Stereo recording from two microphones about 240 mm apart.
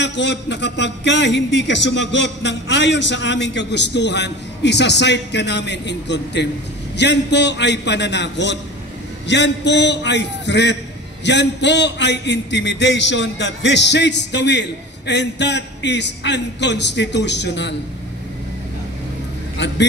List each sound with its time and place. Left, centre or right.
0.0 s a man's voice: left
19.6 s a man's voice: left